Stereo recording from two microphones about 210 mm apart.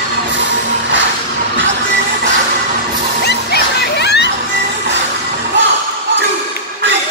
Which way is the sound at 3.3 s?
50° left (ahead or behind).